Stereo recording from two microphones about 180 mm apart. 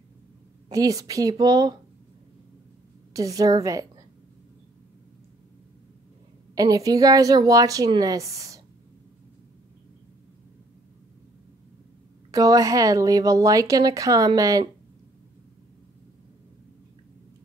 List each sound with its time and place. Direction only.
0.7 s speech: 20° right (ahead or behind)
3.1 s a woman's voice: 20° right (ahead or behind)
6.5 s speech: 20° right (ahead or behind)
12.3 s speech: 20° right (ahead or behind)